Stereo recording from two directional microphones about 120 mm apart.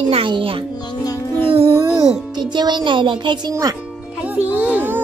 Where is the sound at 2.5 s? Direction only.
40° right (ahead or behind).